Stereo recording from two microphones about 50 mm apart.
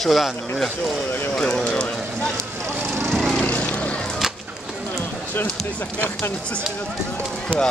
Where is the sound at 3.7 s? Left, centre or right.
Left.